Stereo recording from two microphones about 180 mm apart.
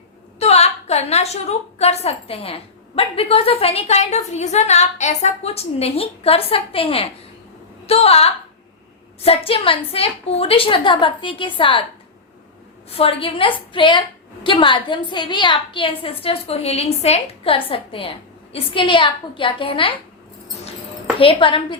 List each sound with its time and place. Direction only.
0.3 s a woman's voice: 35° left (ahead or behind)
12.9 s a woman's voice: 30° left (ahead or behind)
21.2 s a woman's voice: 30° left (ahead or behind)